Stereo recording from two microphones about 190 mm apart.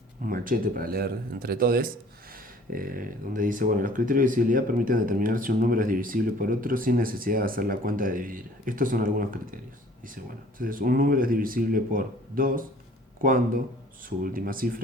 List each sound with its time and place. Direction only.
0.3 s speech: 50° right (ahead or behind)
10.6 s speech: 45° right (ahead or behind)